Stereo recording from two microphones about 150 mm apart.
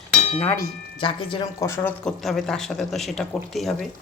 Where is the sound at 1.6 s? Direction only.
20° left (ahead or behind).